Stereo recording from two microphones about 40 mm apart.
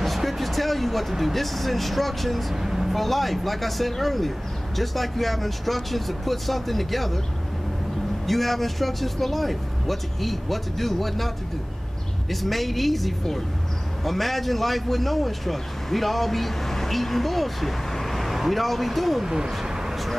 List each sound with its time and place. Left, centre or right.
0.0 s speech: centre
2.5 s speech: centre
2.9 s a man's voice: centre
8.3 s a man's voice: centre
19.2 s speech: centre